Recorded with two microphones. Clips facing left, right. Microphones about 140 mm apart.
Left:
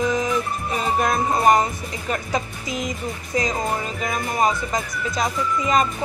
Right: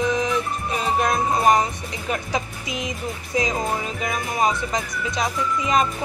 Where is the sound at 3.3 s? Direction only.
Centre (ahead or behind).